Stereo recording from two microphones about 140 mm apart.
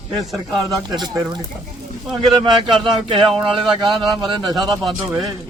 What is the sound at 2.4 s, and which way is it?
Speech, 35° right (ahead or behind).